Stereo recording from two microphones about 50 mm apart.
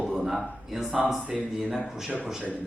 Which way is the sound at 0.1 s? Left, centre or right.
Centre.